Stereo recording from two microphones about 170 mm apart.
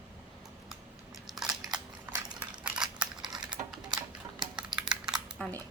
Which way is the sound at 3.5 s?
5° right (ahead or behind).